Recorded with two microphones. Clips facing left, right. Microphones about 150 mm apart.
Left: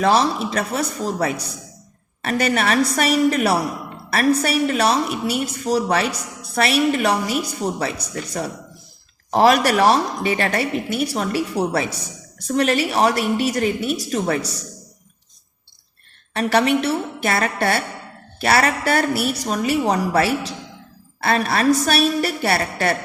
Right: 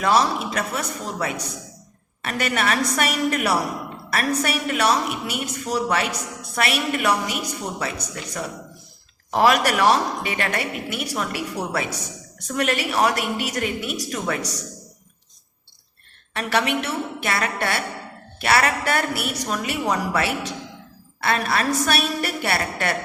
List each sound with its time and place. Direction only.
0.0 s a woman's voice: 30° left (ahead or behind)
16.3 s a woman's voice: 35° left (ahead or behind)